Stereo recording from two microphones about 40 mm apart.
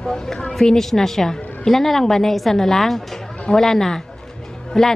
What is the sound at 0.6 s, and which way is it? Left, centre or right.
Speech, centre.